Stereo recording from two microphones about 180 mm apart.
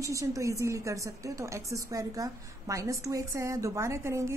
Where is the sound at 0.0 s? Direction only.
20° right (ahead or behind).